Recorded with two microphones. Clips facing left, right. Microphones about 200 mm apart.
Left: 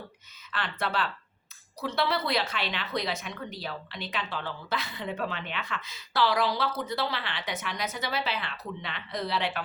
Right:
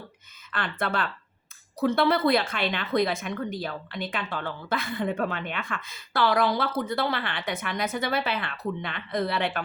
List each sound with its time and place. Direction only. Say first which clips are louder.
0.5 s a woman's voice: right 2 dB; 50° right (ahead or behind)